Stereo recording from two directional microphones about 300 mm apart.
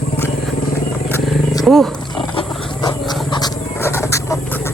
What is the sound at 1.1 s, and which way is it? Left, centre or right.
Wild animals, centre.